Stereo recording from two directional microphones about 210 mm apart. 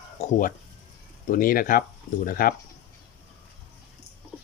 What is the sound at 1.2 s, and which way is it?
Speech, 40° left (ahead or behind).